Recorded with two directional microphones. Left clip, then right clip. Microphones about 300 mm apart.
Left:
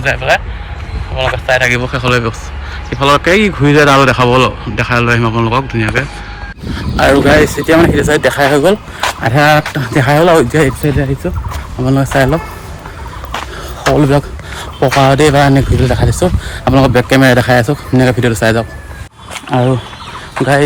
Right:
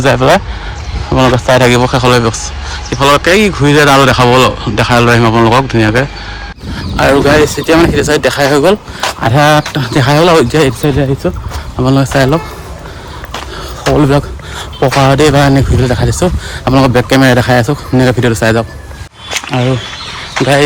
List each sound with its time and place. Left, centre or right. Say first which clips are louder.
1.1 s a man's voice: right 4 dB; right
1.7 s speech: right 5 dB; centre
13.8 s a man's voice: right 1 dB; centre